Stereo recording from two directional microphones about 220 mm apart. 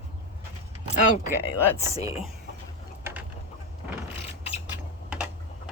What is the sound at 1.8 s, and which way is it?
Speech, 15° right (ahead or behind).